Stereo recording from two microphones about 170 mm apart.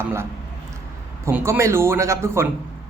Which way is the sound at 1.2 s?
15° right (ahead or behind).